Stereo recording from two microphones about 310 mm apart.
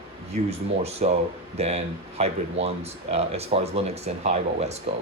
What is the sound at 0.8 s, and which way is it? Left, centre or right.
Speech, centre.